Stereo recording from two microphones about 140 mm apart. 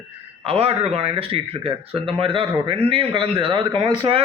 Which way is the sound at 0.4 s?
45° right (ahead or behind).